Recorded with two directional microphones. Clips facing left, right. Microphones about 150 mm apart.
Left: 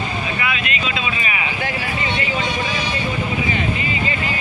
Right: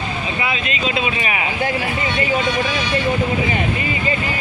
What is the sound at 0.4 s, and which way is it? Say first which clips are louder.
Vehicle: right 1 dB; 30° right (ahead or behind).